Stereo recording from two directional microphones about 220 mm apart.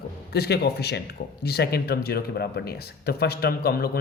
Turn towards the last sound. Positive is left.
turn(degrees=45)  # may be behind; listen again after turning